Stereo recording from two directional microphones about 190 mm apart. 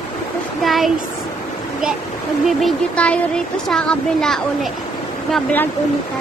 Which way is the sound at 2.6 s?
5° left (ahead or behind).